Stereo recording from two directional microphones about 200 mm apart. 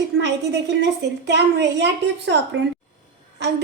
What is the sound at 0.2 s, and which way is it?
A woman's voice, 60° right (ahead or behind).